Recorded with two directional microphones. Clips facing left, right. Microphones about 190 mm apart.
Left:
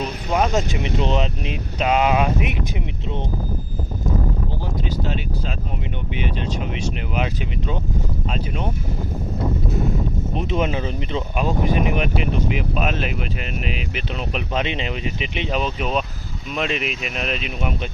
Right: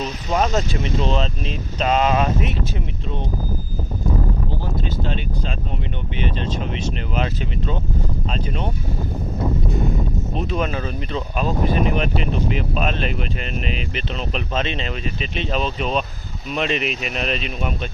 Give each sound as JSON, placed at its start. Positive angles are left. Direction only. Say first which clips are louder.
{"t": 0.0, "sound": "speech", "louder": "even", "side_deg": 10}
{"t": 4.9, "sound": "speech", "louder": "even", "side_deg": 10}
{"t": 8.3, "sound": "speech", "louder": "even", "side_deg": 5}
{"t": 10.3, "sound": "speech", "louder": "left 2 dB", "side_deg": 20}